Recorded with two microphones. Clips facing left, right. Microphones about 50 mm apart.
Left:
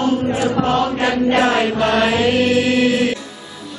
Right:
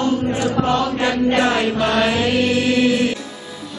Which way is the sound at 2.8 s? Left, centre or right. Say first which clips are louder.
Left 1 dB; centre.